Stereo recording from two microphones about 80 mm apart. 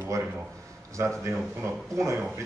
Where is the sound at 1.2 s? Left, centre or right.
Right.